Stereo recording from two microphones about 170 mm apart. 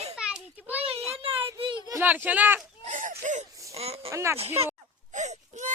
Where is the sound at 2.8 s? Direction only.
45° right (ahead or behind).